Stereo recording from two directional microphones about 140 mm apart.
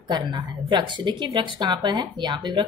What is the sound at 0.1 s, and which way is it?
A woman's voice, 35° right (ahead or behind).